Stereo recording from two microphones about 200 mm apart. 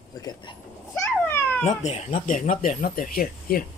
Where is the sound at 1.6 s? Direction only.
35° left (ahead or behind).